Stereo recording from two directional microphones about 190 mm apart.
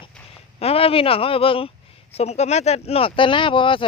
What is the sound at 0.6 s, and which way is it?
Speech, 30° left (ahead or behind).